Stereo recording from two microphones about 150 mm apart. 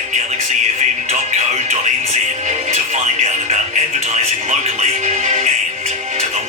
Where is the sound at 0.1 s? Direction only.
50° right (ahead or behind).